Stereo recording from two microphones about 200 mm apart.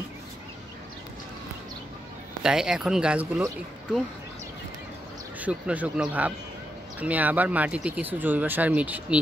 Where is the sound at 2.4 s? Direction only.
5° right (ahead or behind).